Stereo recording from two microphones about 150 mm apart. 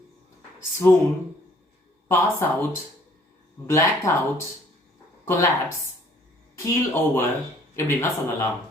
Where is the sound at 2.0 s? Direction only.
15° left (ahead or behind).